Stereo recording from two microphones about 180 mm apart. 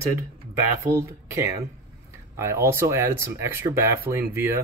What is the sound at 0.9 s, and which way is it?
Speech, 15° right (ahead or behind).